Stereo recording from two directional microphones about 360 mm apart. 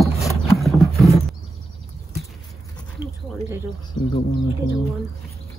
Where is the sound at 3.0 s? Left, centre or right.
Centre.